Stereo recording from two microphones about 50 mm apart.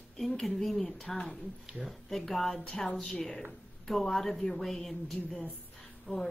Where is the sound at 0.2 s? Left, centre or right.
Centre.